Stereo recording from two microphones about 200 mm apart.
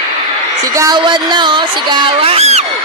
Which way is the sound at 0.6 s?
15° right (ahead or behind).